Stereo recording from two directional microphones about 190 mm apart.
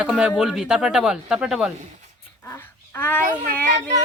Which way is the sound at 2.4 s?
10° left (ahead or behind).